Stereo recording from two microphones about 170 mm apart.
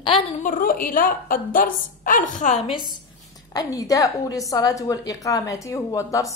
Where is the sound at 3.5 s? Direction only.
20° left (ahead or behind).